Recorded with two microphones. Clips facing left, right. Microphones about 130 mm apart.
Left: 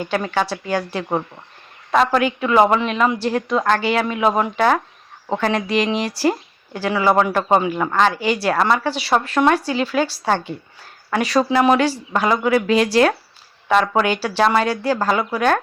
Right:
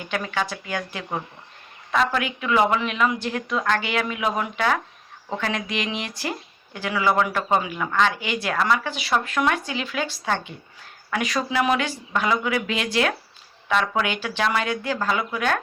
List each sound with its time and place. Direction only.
0.3 s a woman's voice: 35° left (ahead or behind)